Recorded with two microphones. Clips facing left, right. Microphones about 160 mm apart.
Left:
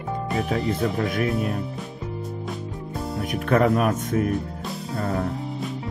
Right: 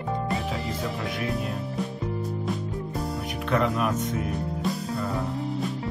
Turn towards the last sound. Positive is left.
turn(degrees=50)  # may be behind; listen again after turning